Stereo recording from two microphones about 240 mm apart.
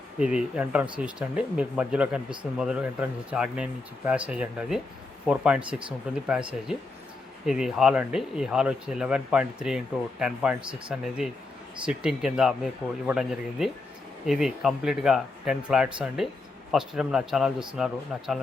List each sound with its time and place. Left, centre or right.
0.2 s speech: centre
7.4 s speech: centre